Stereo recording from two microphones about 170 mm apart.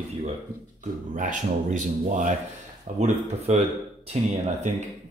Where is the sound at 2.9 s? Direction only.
60° right (ahead or behind).